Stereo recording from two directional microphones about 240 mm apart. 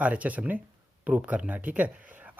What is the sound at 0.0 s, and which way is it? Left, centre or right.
Speech, centre.